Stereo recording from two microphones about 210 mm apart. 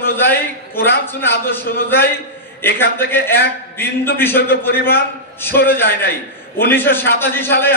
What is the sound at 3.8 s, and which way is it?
Speech, 10° left (ahead or behind).